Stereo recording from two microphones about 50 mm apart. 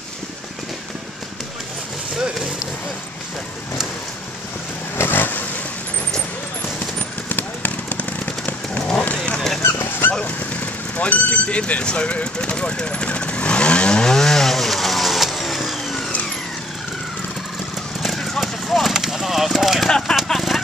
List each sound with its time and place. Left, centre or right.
4.9 s vehicle: left
7.0 s a sound: left
9.0 s honk: left
9.6 s dog: left
10.2 s vehicle: left; by 16.0 s centre
18.0 s a sound: centre